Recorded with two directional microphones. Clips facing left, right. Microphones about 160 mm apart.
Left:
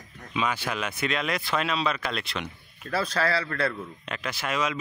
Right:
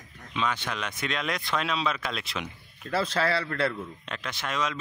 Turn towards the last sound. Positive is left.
turn(degrees=5)  # may be behind; listen again after turning